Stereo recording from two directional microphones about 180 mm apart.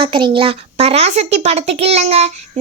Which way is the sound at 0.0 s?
30° right (ahead or behind).